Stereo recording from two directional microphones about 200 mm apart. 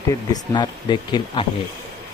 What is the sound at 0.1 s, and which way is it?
Speech, 20° left (ahead or behind).